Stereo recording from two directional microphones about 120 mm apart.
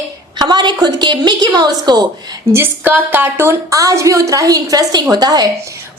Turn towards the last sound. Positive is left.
turn(degrees=-35)  # may be behind; listen again after turning